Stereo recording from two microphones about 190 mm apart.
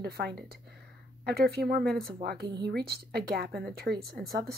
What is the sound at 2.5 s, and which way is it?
Speech, 20° right (ahead or behind).